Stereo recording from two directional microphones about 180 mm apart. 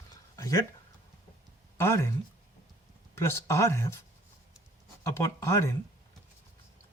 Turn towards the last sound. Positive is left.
turn(degrees=15)  # may be behind; listen again after turning